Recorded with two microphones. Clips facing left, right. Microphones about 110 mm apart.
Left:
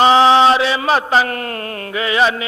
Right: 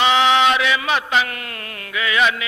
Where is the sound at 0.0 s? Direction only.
35° left (ahead or behind).